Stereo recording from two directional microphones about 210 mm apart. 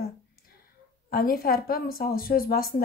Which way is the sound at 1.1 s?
45° left (ahead or behind).